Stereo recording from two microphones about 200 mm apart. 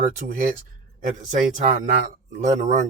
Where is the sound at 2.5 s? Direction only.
35° right (ahead or behind).